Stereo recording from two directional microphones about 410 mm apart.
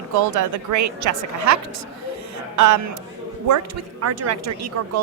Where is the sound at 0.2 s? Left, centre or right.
Right.